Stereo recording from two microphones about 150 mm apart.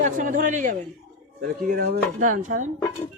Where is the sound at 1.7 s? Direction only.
90° right; by 2.6 s 65° right (ahead or behind).